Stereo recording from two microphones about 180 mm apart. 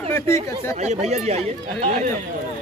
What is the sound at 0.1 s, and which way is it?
Speech, 15° left (ahead or behind).